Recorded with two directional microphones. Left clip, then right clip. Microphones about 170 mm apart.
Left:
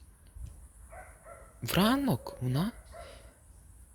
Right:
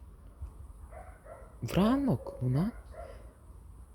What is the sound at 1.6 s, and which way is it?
Speech, 5° right (ahead or behind).